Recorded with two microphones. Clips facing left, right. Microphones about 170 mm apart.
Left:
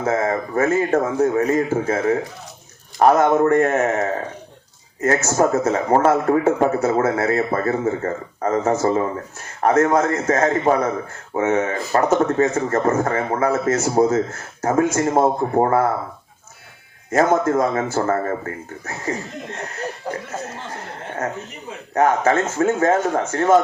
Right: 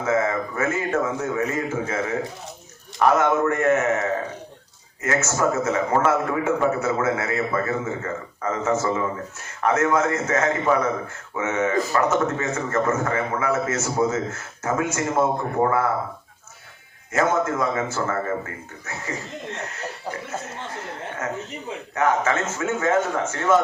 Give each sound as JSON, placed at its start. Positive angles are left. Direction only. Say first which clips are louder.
{"t": 0.0, "sound": "a man's voice", "louder": "left 2 dB", "side_deg": 35}
{"t": 17.1, "sound": "a man's voice", "louder": "left 5 dB", "side_deg": 35}
{"t": 21.9, "sound": "a man's voice", "louder": "left 5 dB", "side_deg": 35}